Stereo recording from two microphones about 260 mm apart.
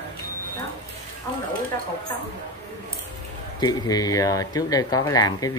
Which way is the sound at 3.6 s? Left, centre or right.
Centre.